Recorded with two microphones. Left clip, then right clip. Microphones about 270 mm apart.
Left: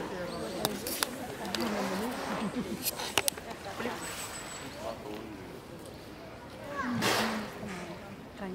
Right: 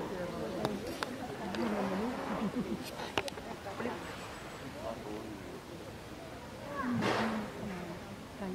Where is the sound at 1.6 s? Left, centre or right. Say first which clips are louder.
Left 1 dB; centre.